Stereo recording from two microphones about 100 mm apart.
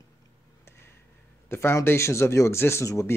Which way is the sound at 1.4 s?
25° left (ahead or behind).